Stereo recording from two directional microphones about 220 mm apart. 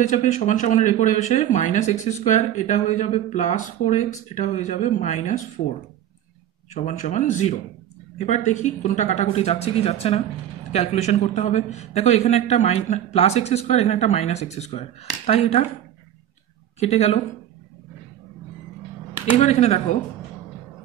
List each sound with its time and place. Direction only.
0.1 s a man's voice: 35° left (ahead or behind)
16.8 s a man's voice: 30° left (ahead or behind)
19.4 s a man's voice: 30° left (ahead or behind)